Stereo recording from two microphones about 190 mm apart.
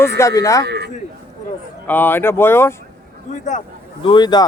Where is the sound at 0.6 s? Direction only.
60° right (ahead or behind).